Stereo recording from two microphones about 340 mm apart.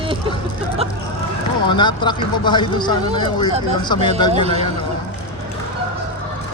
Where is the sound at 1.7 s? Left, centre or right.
Centre.